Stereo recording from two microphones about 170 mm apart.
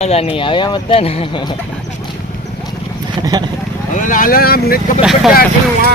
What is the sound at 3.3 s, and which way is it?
Speech, 20° right (ahead or behind).